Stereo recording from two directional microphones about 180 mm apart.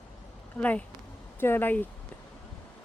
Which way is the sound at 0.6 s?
5° left (ahead or behind).